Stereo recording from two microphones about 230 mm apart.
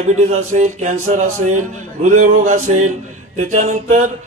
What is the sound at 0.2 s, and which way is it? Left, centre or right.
Speech, right.